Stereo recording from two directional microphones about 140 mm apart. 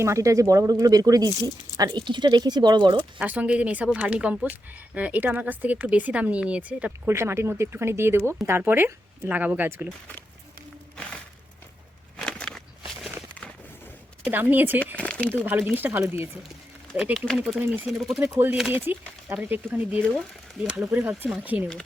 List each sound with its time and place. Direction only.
0.0 s speech: 20° right (ahead or behind)
3.2 s speech: 10° right (ahead or behind)
10.9 s music: 5° left (ahead or behind)
12.1 s walk: 5° left (ahead or behind)
14.3 s speech: 15° right (ahead or behind)
14.9 s speech: 10° left (ahead or behind)
15.4 s speech: 15° right (ahead or behind)
17.2 s speech: centre (ahead or behind)
18.2 s speech: 15° right (ahead or behind)